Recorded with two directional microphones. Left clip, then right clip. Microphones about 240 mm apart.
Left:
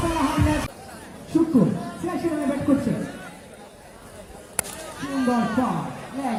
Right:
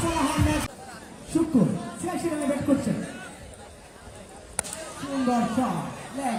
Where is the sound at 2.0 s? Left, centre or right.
Right.